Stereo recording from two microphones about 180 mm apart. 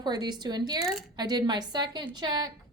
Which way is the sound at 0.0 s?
25° right (ahead or behind).